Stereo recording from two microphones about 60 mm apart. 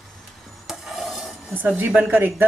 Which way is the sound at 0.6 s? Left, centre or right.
Centre.